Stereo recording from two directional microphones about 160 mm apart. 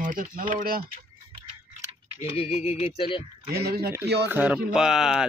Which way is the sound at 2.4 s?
40° left (ahead or behind).